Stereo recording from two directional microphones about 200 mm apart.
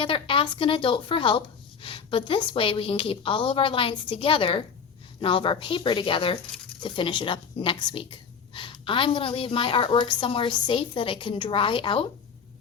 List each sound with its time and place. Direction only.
0.0 s speech: 25° left (ahead or behind)